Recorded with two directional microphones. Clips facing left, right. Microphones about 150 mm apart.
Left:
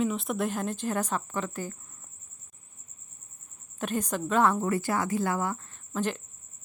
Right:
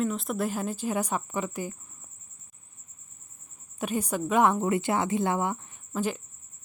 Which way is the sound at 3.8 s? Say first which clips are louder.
Right 1 dB; 10° right (ahead or behind).